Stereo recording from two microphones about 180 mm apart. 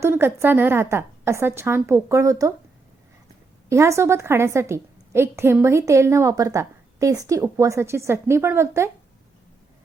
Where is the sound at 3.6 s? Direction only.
15° right (ahead or behind).